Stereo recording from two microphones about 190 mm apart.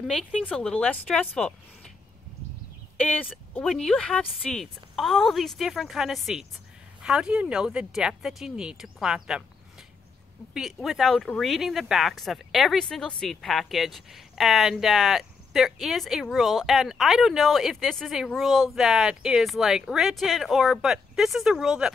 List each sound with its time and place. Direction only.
0.0 s speech: centre (ahead or behind)
3.5 s speech: centre (ahead or behind)
10.5 s speech: centre (ahead or behind)